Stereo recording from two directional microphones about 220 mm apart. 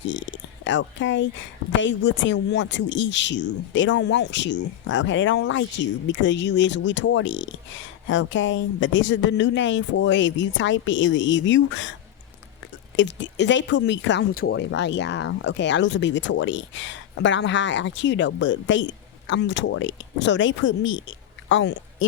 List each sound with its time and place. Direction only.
0.0 s speech: 55° left (ahead or behind)
13.0 s a woman's voice: 55° left (ahead or behind)